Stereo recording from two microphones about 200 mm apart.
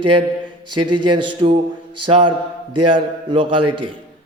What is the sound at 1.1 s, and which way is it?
A man's voice, 25° right (ahead or behind).